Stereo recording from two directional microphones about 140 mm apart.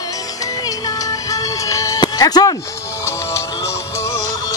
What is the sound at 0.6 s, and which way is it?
Music, 25° left (ahead or behind).